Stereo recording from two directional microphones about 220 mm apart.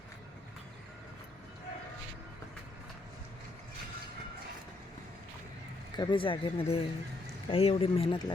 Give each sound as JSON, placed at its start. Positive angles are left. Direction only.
{"t": 6.0, "sound": "speech", "side_deg": 20}